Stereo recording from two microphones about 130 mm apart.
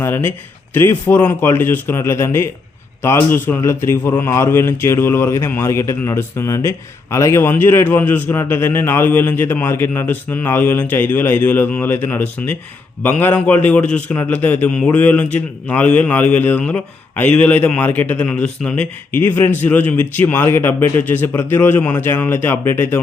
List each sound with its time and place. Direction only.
0.0 s a man's voice: 15° left (ahead or behind)